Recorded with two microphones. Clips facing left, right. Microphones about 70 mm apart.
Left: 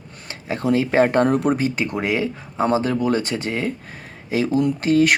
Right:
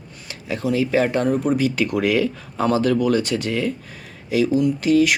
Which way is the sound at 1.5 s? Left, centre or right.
Left.